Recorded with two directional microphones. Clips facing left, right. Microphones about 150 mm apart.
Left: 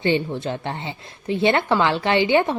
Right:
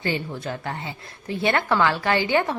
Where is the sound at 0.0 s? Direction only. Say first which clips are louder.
Left 6 dB; 25° left (ahead or behind).